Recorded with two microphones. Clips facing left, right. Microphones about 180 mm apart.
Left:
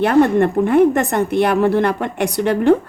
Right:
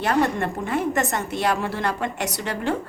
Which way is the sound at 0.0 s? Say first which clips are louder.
Left 9 dB; 55° left (ahead or behind).